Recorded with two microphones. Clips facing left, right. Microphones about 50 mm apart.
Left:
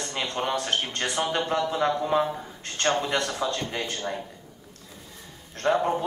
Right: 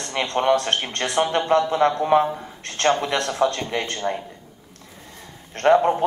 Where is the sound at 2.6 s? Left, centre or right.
Right.